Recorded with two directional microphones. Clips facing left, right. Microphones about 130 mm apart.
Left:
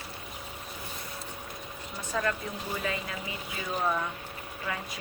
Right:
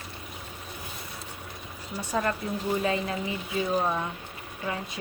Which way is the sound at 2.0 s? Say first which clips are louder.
Right 3 dB; 35° right (ahead or behind).